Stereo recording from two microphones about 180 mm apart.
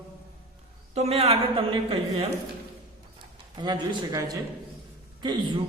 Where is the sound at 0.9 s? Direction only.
35° right (ahead or behind).